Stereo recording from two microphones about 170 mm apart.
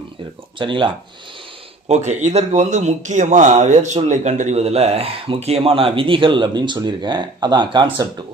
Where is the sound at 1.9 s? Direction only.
40° right (ahead or behind).